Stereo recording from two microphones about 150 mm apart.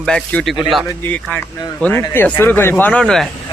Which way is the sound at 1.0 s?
10° left (ahead or behind).